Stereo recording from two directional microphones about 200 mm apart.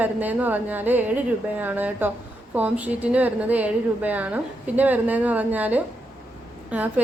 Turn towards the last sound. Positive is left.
turn(degrees=-10)  # may be behind; listen again after turning